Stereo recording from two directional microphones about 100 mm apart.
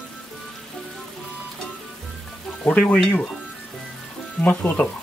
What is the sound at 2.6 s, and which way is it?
Speech, 15° left (ahead or behind).